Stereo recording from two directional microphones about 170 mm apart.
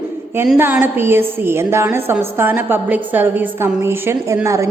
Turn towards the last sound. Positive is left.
turn(degrees=-15)  # may be behind; listen again after turning